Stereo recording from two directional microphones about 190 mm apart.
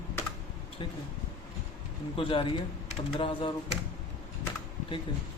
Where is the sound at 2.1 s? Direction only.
25° left (ahead or behind).